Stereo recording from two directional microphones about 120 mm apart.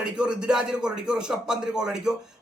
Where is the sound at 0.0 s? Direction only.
5° right (ahead or behind).